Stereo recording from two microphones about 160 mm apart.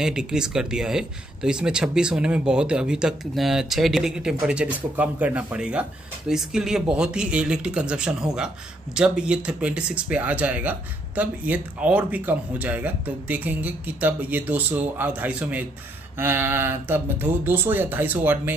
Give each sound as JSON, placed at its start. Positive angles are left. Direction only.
{"t": 0.0, "sound": "speech", "side_deg": -5}